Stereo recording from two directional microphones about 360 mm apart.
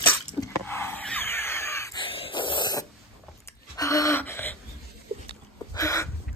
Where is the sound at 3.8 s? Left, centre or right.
Centre.